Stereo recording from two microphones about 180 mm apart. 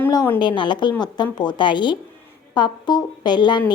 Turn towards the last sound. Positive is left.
turn(degrees=25)  # may be behind; listen again after turning